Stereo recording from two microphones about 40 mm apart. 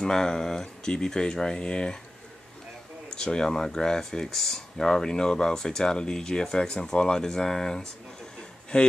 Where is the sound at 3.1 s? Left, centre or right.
Centre.